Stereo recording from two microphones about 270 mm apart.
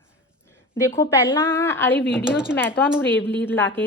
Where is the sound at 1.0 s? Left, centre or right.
Centre.